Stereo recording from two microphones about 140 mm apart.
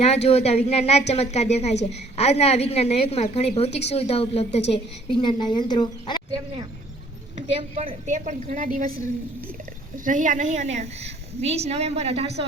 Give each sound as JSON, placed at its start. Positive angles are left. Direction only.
{"t": 0.0, "sound": "a woman's voice", "side_deg": 50}
{"t": 5.1, "sound": "speech", "side_deg": 35}
{"t": 7.5, "sound": "a woman's voice", "side_deg": -40}
{"t": 8.0, "sound": "a woman's voice", "side_deg": -60}
{"t": 10.0, "sound": "a woman's voice", "side_deg": -70}